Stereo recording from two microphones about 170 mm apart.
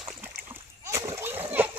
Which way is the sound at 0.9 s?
15° right (ahead or behind).